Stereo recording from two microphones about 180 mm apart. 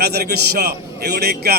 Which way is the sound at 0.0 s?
60° right (ahead or behind).